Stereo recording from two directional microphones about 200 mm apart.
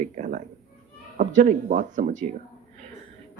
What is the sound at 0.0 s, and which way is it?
Cat, 40° right (ahead or behind).